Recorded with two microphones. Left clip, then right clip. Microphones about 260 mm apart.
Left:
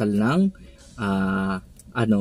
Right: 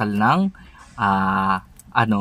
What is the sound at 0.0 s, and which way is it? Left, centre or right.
Speech, right.